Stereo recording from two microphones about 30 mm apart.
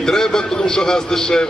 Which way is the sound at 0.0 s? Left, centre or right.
Centre.